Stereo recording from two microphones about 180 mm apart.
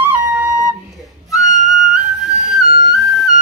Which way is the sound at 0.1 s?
10° right (ahead or behind).